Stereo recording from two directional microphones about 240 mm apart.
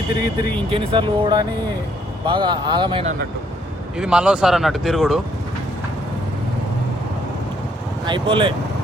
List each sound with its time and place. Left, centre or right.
0.7 s speech: centre
3.9 s speech: centre
8.0 s speech: centre